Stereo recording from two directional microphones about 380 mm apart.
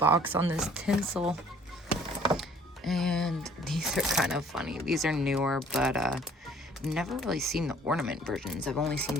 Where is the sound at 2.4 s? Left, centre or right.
Centre.